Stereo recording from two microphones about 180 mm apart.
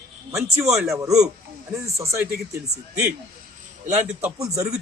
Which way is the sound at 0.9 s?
15° right (ahead or behind).